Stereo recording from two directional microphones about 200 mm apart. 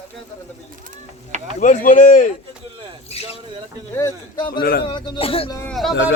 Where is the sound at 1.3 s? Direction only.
35° right (ahead or behind).